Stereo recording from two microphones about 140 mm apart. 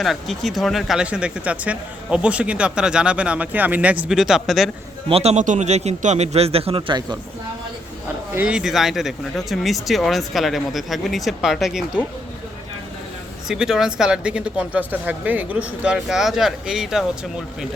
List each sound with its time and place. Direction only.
0.0 s speech: centre (ahead or behind)
5.0 s speech: 45° right (ahead or behind)
8.4 s speech: 5° right (ahead or behind)
13.5 s speech: 5° right (ahead or behind)